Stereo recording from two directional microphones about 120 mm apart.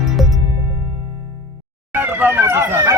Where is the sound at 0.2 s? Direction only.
Centre (ahead or behind).